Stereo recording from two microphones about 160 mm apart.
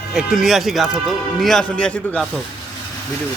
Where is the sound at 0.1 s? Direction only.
5° right (ahead or behind).